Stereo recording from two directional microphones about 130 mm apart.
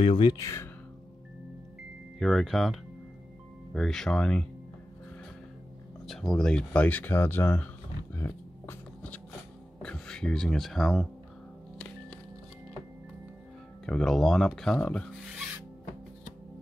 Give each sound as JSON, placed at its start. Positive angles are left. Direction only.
{"t": 0.0, "sound": "speech", "side_deg": 40}
{"t": 0.4, "sound": "speech", "side_deg": 20}
{"t": 2.1, "sound": "speech", "side_deg": 0}
{"t": 6.0, "sound": "speech", "side_deg": 5}
{"t": 8.3, "sound": "a sound", "side_deg": 10}
{"t": 9.8, "sound": "speech", "side_deg": 5}
{"t": 13.8, "sound": "speech", "side_deg": 5}